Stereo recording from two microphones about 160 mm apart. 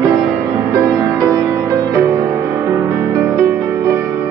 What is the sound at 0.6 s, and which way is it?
Music, 20° right (ahead or behind).